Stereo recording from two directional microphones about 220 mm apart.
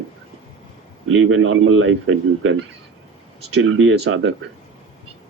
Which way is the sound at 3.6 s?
65° right (ahead or behind).